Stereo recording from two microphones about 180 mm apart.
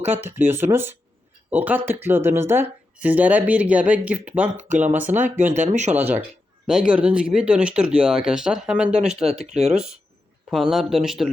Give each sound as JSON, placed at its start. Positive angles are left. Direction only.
{"t": 0.1, "sound": "speech", "side_deg": -10}
{"t": 4.5, "sound": "speech", "side_deg": -40}
{"t": 5.2, "sound": "speech", "side_deg": -10}
{"t": 5.5, "sound": "speech", "side_deg": -40}
{"t": 6.0, "sound": "speech", "side_deg": -10}
{"t": 9.5, "sound": "speech", "side_deg": -35}
{"t": 9.7, "sound": "speech", "side_deg": -5}